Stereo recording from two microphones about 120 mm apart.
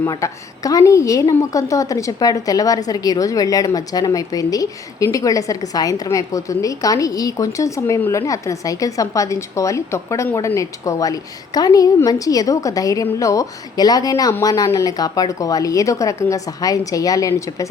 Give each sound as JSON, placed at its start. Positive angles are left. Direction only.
{"t": 0.1, "sound": "a woman's voice", "side_deg": 30}